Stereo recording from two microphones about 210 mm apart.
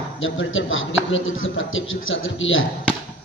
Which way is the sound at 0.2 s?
65° left (ahead or behind).